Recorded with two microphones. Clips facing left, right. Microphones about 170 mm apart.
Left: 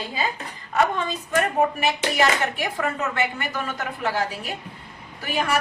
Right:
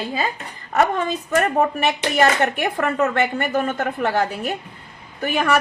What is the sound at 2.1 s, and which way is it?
A woman's voice, 60° right (ahead or behind).